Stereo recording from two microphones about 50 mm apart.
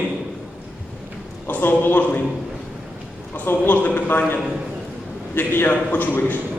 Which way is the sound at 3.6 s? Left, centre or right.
Left.